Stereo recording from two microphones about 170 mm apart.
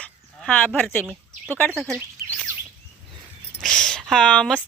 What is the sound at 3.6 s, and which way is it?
Speech, 5° left (ahead or behind).